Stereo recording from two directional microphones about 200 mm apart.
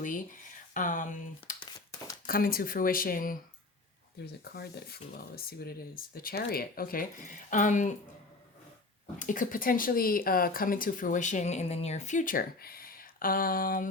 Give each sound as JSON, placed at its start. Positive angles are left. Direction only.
{"t": 0.0, "sound": "speech", "side_deg": 40}
{"t": 4.4, "sound": "speech", "side_deg": 50}
{"t": 9.1, "sound": "speech", "side_deg": 40}